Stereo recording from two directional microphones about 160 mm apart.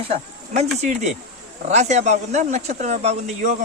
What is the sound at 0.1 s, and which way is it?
Speech, 40° right (ahead or behind).